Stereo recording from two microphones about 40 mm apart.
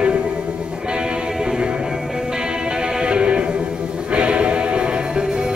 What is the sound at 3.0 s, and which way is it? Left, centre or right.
Music, right.